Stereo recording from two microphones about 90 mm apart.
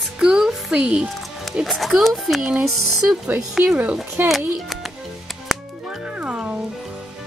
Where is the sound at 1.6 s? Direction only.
Centre (ahead or behind).